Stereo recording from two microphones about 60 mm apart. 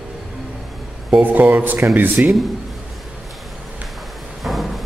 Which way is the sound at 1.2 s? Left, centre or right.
Right.